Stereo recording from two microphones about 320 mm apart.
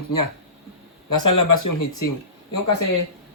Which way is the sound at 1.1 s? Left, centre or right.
Left.